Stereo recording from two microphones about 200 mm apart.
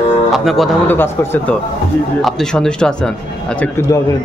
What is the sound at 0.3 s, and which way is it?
Music, centre (ahead or behind).